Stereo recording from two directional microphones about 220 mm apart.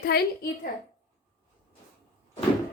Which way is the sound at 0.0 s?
45° left (ahead or behind).